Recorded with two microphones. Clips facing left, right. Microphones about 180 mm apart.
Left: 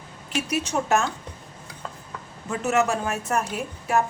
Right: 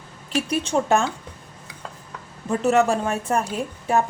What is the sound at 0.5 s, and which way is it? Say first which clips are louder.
Speech: right 3 dB; 30° right (ahead or behind).